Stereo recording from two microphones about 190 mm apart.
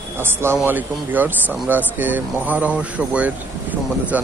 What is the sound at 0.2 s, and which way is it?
Speech, 10° right (ahead or behind).